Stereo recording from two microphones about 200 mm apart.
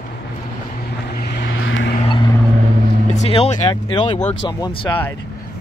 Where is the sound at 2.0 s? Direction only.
25° left (ahead or behind).